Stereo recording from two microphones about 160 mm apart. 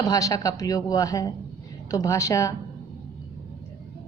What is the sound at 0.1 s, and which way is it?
A woman's voice, 20° left (ahead or behind).